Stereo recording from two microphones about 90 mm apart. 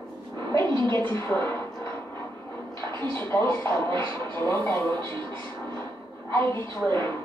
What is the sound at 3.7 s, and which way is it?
Music, 55° right (ahead or behind).